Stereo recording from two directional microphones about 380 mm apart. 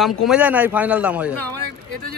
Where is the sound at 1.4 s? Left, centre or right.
Right.